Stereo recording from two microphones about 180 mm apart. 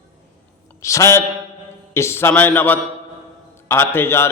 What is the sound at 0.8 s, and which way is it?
A man's voice, 15° left (ahead or behind).